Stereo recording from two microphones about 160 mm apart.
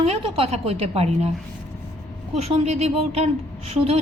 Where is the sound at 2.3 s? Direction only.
40° right (ahead or behind).